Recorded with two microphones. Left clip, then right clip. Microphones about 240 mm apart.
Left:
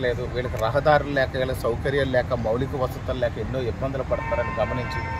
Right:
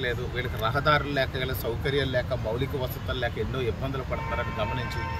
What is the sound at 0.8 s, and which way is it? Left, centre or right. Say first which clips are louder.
Speech: left 4 dB; centre.